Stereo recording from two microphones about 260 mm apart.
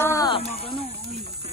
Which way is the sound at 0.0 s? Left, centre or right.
Centre.